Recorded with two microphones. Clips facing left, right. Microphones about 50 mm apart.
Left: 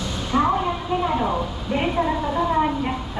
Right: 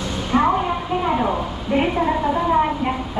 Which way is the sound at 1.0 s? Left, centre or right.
Right.